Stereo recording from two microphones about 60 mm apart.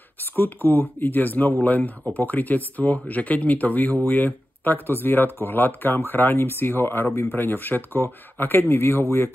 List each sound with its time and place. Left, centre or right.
0.2 s speech: left